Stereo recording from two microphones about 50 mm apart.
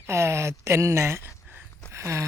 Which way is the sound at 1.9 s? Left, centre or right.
Right.